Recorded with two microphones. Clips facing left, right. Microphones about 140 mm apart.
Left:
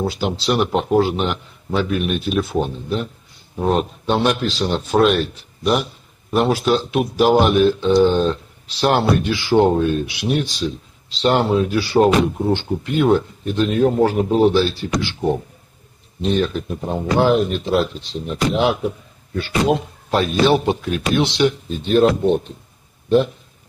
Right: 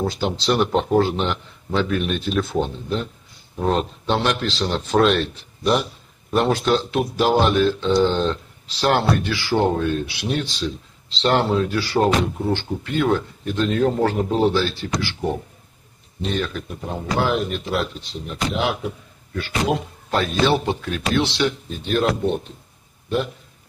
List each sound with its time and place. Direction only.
0.0 s speech: 10° left (ahead or behind)
16.2 s speech: 20° left (ahead or behind)